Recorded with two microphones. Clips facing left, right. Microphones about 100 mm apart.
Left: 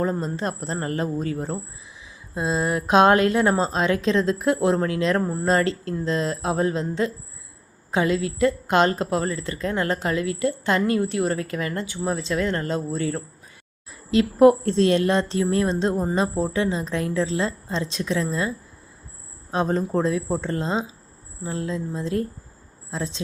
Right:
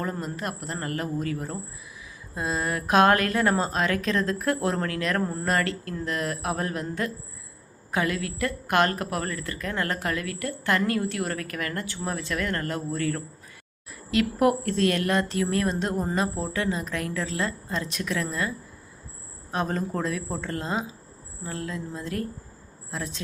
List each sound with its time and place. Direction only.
0.0 s a woman's voice: 30° left (ahead or behind)
5.5 s a woman's voice: 25° left (ahead or behind)